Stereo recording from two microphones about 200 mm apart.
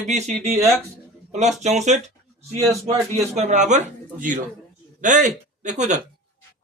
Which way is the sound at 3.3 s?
35° right (ahead or behind).